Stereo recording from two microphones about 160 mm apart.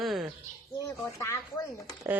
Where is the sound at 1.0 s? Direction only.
15° left (ahead or behind).